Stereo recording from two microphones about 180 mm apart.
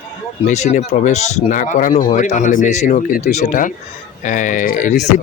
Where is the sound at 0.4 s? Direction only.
40° left (ahead or behind).